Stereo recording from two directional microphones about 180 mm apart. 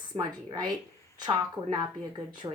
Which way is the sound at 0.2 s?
25° right (ahead or behind).